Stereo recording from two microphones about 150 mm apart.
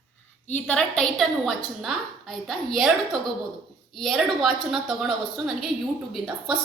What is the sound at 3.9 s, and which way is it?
A woman's voice, centre (ahead or behind).